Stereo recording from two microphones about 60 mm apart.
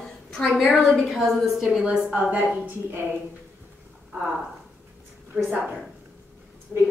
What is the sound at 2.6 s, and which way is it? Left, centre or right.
Speech, right.